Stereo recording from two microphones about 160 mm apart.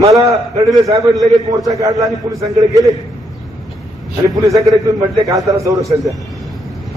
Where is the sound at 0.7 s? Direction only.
20° right (ahead or behind).